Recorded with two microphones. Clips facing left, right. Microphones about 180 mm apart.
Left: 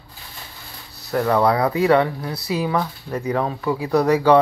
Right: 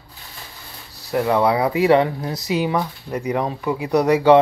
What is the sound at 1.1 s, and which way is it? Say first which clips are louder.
Speech: even; 10° right (ahead or behind).